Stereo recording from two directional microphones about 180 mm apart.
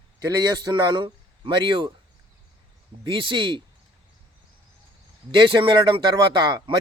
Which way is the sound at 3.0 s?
25° right (ahead or behind).